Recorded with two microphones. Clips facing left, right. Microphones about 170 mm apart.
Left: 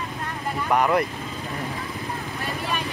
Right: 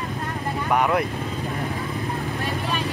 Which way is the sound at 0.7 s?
Centre (ahead or behind).